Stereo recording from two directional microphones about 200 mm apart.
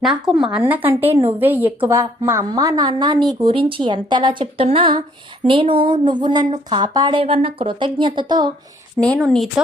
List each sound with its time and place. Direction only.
0.3 s a woman's voice: centre (ahead or behind); by 8.5 s 20° right (ahead or behind)
9.0 s speech: centre (ahead or behind)